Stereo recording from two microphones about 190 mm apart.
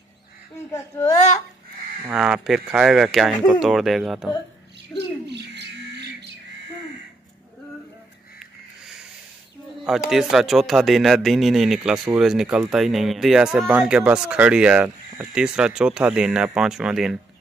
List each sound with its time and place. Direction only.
0.7 s speech: 15° left (ahead or behind)
2.0 s speech: 5° right (ahead or behind)
5.2 s bird: 65° right (ahead or behind)
8.4 s a sound: centre (ahead or behind)
9.8 s speech: centre (ahead or behind)